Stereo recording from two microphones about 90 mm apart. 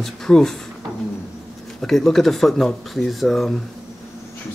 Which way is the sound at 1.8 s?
5° left (ahead or behind).